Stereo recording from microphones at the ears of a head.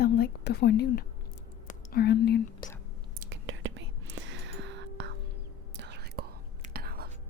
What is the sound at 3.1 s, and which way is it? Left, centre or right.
Whispering, right.